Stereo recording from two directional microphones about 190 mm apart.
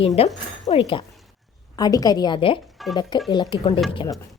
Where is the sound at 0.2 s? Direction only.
30° left (ahead or behind).